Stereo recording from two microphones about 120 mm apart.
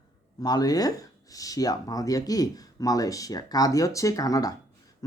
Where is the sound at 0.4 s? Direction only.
30° left (ahead or behind).